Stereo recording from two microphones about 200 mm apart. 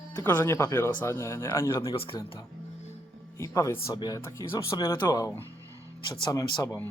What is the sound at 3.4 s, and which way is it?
Speech, 15° left (ahead or behind).